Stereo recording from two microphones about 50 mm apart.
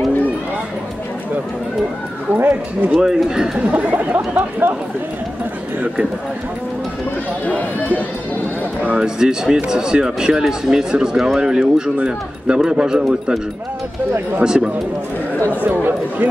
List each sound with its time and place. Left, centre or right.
2.3 s speech: right
3.0 s speech: centre
3.6 s speech: right
7.4 s speech: left
9.0 s speech: centre
14.4 s speech: centre
15.6 s speech: right